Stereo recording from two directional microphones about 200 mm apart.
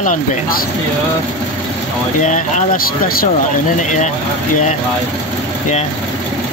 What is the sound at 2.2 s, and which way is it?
Speech, 40° left (ahead or behind).